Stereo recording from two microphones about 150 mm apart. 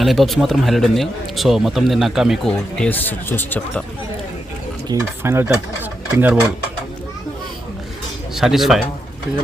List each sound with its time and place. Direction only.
0.0 s speech: centre (ahead or behind)
4.9 s speech: 15° right (ahead or behind)
8.4 s speech: centre (ahead or behind)